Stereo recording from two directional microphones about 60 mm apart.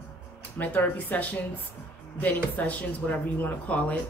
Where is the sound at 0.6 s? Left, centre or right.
Left.